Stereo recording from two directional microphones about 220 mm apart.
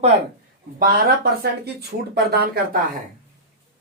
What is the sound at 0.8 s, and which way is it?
Speech, 45° right (ahead or behind).